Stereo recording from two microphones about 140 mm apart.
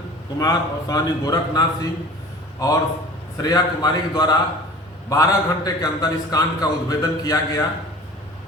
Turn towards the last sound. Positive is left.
turn(degrees=25)  # may be behind; listen again after turning